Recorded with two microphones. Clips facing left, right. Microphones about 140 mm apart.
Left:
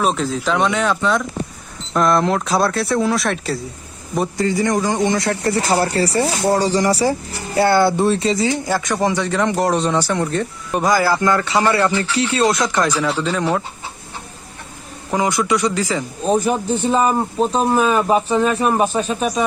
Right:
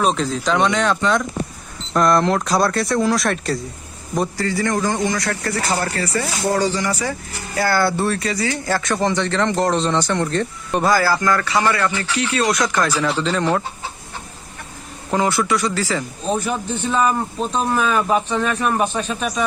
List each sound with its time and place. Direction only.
0.0 s speech: 5° left (ahead or behind)
4.4 s speech: 20° left (ahead or behind)
8.6 s speech: 15° left (ahead or behind)
13.0 s speech: 10° left (ahead or behind)
15.1 s speech: 15° left (ahead or behind)
16.2 s speech: 35° left (ahead or behind)